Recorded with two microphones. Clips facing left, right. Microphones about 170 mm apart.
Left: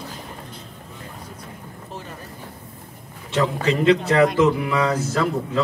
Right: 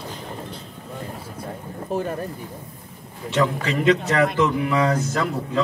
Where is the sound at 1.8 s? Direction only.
60° right (ahead or behind).